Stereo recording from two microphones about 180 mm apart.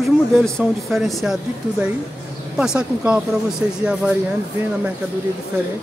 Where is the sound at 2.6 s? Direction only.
5° right (ahead or behind).